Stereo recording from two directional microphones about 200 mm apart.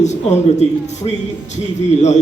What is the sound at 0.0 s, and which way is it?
A man's voice, 35° left (ahead or behind).